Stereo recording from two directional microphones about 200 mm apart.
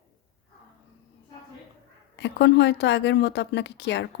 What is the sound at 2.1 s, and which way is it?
A woman's voice, 60° left (ahead or behind).